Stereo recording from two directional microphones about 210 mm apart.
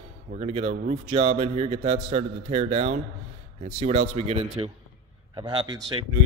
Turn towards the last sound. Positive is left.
turn(degrees=-20)  # may be behind; listen again after turning